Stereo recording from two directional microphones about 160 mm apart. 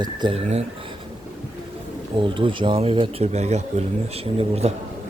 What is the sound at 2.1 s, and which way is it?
Speech, 30° right (ahead or behind).